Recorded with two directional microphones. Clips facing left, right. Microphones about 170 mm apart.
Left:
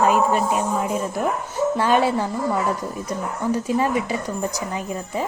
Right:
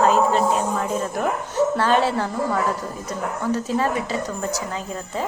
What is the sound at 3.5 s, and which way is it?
Speech, 15° left (ahead or behind).